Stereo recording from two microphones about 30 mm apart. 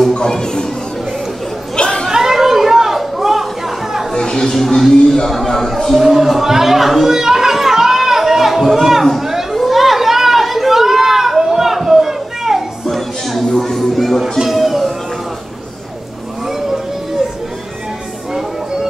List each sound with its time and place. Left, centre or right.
0.1 s music: left
1.8 s chatter: left
2.0 s chatter: centre
4.1 s chatter: centre
5.9 s chatter: centre
12.8 s a sound: centre
13.9 s music: centre
16.4 s vehicle: centre